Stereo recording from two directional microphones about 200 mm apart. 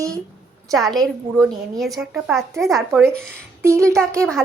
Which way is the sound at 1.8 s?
Centre (ahead or behind).